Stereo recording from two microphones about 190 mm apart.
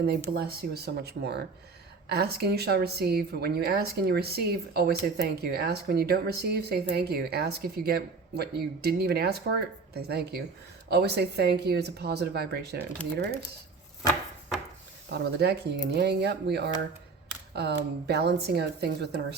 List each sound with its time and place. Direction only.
0.3 s speech: 55° right (ahead or behind)
15.1 s speech: 60° right (ahead or behind)